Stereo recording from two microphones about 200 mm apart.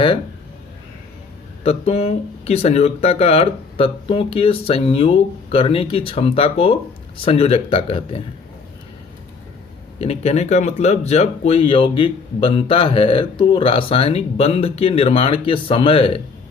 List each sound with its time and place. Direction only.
1.6 s speech: 30° left (ahead or behind)
10.0 s speech: 30° left (ahead or behind)